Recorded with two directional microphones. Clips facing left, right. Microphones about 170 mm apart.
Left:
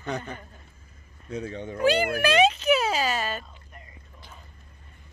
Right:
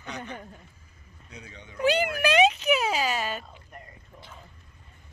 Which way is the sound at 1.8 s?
15° right (ahead or behind).